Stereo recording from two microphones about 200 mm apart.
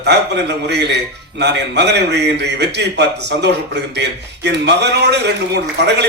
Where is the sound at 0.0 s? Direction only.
60° right (ahead or behind).